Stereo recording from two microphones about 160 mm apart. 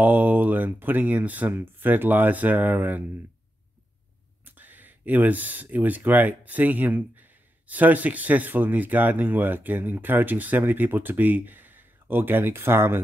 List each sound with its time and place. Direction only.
0.0 s speech: 10° right (ahead or behind)
4.5 s speech: 10° right (ahead or behind)